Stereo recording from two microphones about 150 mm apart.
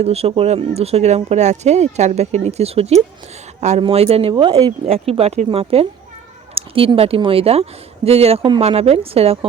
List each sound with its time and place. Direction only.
0.0 s speech: 45° right (ahead or behind); by 4.7 s 30° right (ahead or behind)
4.9 s speech: 40° right (ahead or behind)